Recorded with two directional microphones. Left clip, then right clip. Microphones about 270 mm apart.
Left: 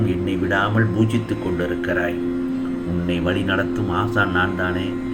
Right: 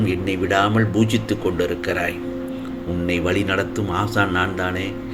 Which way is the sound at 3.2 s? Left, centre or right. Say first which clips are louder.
Left 1 dB; right.